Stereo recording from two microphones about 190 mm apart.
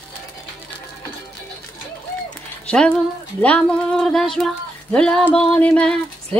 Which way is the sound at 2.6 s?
5° left (ahead or behind).